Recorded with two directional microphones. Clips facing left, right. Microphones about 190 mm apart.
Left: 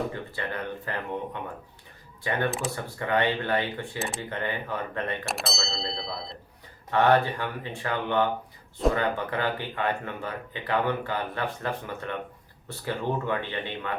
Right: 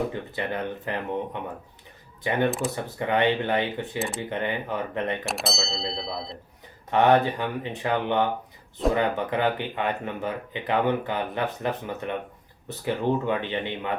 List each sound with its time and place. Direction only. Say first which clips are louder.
0.1 s speech: right 3 dB; 20° right (ahead or behind)
5.2 s speech: right 3 dB; centre (ahead or behind)
6.9 s speech: right 2 dB; 20° right (ahead or behind)